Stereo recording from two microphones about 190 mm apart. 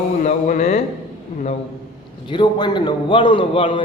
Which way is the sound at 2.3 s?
25° left (ahead or behind).